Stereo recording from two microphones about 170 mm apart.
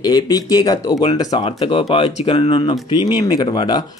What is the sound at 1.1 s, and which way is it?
Speech, 40° left (ahead or behind).